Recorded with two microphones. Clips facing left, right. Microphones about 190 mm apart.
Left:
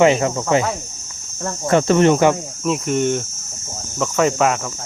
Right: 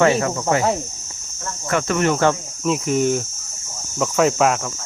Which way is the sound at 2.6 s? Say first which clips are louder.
Even; centre (ahead or behind).